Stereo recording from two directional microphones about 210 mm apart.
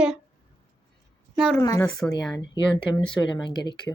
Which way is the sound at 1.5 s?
15° left (ahead or behind).